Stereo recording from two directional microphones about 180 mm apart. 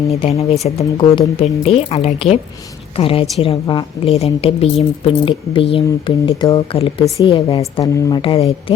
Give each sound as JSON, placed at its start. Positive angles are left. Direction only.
{"t": 0.1, "sound": "a woman's voice", "side_deg": 35}
{"t": 7.9, "sound": "speech", "side_deg": 15}
{"t": 8.2, "sound": "speech", "side_deg": 30}